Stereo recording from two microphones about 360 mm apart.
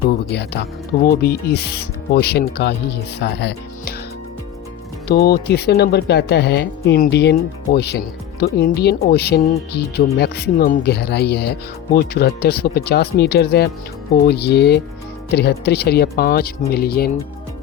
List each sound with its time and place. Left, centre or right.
0.3 s speech: left
5.0 s speech: left